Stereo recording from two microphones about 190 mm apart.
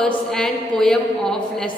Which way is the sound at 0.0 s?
Centre (ahead or behind).